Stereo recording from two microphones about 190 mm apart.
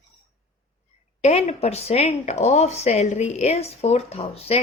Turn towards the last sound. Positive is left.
turn(degrees=30)  # may be behind; listen again after turning